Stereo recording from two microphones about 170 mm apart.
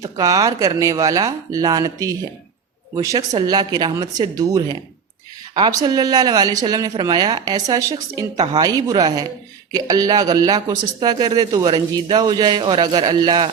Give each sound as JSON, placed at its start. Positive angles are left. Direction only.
{"t": 0.0, "sound": "speech", "side_deg": -20}